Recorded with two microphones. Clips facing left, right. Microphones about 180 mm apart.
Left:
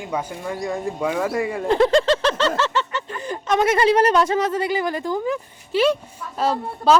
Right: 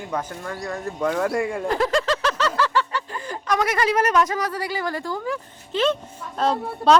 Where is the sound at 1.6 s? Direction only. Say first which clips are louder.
Left 8 dB; 30° left (ahead or behind).